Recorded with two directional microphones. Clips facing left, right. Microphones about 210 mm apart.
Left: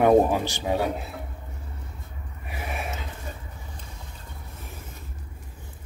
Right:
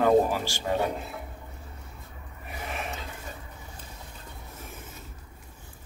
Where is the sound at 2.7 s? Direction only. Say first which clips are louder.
Left 2 dB; 10° left (ahead or behind).